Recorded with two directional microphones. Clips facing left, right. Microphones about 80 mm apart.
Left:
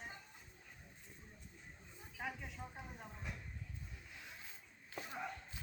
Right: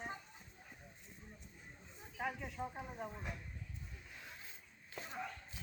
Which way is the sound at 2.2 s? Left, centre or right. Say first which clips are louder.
Right 4 dB; centre.